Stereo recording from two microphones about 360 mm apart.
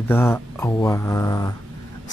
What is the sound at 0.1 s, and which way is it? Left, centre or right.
Speech, centre.